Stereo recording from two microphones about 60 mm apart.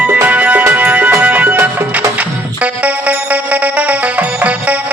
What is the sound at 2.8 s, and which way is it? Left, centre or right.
Music, right.